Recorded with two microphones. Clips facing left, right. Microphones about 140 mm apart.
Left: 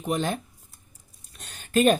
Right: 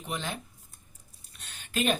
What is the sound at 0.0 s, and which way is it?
Speech, 45° left (ahead or behind).